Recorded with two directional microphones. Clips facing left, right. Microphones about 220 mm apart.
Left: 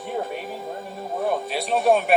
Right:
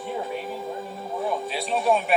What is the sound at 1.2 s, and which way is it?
Speech, 65° left (ahead or behind).